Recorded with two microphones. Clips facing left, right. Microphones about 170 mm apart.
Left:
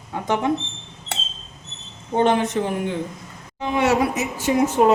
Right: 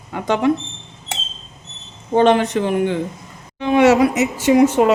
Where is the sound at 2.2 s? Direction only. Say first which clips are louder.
Right 5 dB; 75° right (ahead or behind).